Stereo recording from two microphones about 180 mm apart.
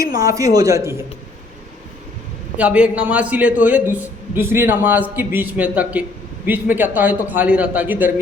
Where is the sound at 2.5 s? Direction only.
5° right (ahead or behind).